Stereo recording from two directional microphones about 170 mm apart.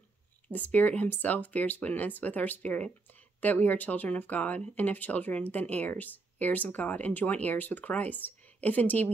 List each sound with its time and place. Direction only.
0.5 s speech: 10° left (ahead or behind)